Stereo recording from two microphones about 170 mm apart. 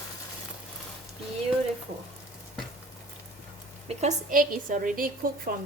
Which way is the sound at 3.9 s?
40° right (ahead or behind).